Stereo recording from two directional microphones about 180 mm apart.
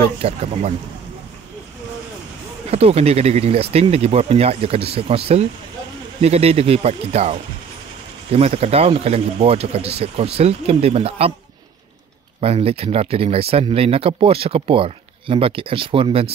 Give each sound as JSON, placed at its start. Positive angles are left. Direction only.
{"t": 0.2, "sound": "speech", "side_deg": -35}
{"t": 2.7, "sound": "speech", "side_deg": -35}
{"t": 12.4, "sound": "speech", "side_deg": -35}